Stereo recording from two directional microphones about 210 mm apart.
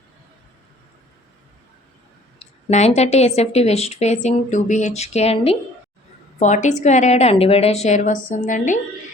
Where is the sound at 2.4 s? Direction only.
30° left (ahead or behind).